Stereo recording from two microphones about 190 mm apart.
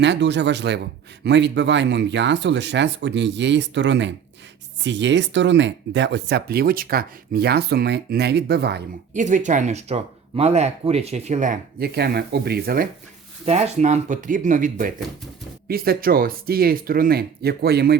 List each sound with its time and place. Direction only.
0.0 s speech: 65° right (ahead or behind)
9.1 s speech: 40° right (ahead or behind)
11.9 s speech: 55° right (ahead or behind)
13.4 s speech: 35° right (ahead or behind); by 17.9 s 55° right (ahead or behind)